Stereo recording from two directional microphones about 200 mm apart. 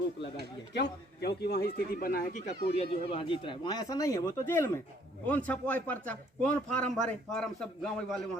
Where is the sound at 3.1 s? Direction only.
25° left (ahead or behind).